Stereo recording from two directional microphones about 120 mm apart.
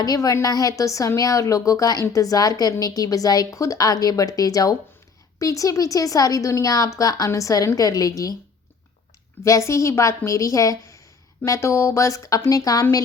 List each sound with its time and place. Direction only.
0.0 s speech: 30° left (ahead or behind)
9.4 s speech: 25° left (ahead or behind)